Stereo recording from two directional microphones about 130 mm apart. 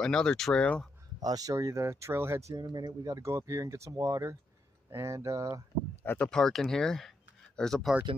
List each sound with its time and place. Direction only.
0.0 s speech: 5° left (ahead or behind)
1.2 s speech: 30° right (ahead or behind)
6.0 s speech: 5° left (ahead or behind)